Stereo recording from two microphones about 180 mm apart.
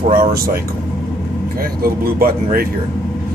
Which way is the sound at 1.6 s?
55° right (ahead or behind).